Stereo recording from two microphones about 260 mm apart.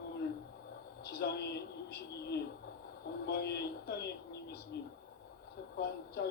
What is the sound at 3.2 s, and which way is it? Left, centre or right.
Speech, left.